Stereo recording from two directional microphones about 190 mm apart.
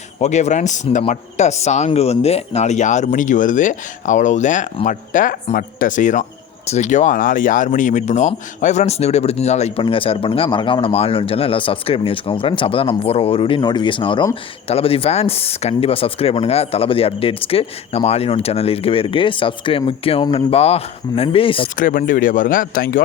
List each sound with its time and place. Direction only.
0.2 s speech: 35° left (ahead or behind)
21.8 s speech: 45° left (ahead or behind)